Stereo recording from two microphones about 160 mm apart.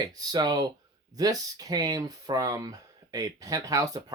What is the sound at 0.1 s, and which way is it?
Speech, 25° right (ahead or behind).